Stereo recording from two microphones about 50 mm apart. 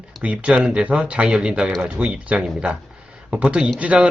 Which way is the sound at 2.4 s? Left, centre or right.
Centre.